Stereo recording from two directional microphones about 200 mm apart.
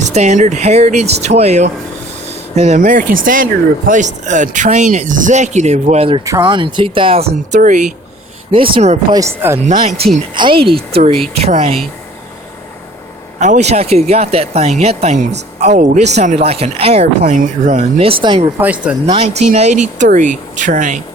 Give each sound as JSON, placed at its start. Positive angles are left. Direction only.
{"t": 0.0, "sound": "speech", "side_deg": -35}
{"t": 8.5, "sound": "speech", "side_deg": -25}
{"t": 9.1, "sound": "speech", "side_deg": -15}
{"t": 9.6, "sound": "speech", "side_deg": -45}
{"t": 10.3, "sound": "speech", "side_deg": -25}
{"t": 13.4, "sound": "speech", "side_deg": -35}
{"t": 18.6, "sound": "speech", "side_deg": -5}
{"t": 19.0, "sound": "speech", "side_deg": -30}